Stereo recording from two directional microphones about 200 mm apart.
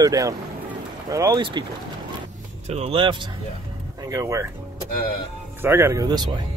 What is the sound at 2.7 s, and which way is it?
Speech, 30° right (ahead or behind).